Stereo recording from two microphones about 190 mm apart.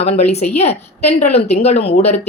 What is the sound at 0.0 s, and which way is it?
A woman's voice, 35° left (ahead or behind).